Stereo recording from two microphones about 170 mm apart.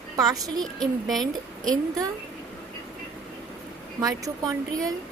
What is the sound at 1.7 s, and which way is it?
Speech, 20° right (ahead or behind).